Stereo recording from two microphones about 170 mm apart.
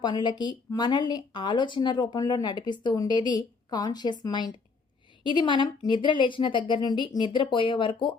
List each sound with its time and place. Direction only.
0.0 s speech: 25° left (ahead or behind)